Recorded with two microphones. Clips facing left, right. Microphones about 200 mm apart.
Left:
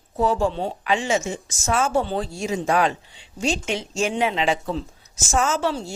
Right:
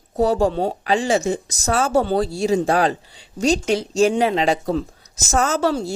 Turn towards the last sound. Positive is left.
turn(degrees=-40)  # may be behind; listen again after turning